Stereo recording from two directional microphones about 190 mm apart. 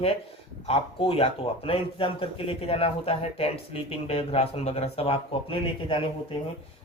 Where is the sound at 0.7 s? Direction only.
30° left (ahead or behind).